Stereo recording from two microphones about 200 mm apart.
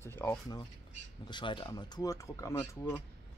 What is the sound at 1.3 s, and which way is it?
Speech, 25° left (ahead or behind).